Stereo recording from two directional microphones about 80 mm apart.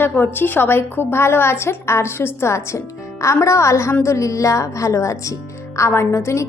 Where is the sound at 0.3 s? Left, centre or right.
Left.